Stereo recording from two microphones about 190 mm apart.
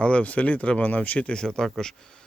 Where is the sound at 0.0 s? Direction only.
5° left (ahead or behind).